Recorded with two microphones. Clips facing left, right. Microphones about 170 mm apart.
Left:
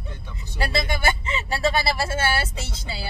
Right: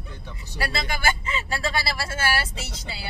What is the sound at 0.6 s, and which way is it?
Speech, 25° left (ahead or behind).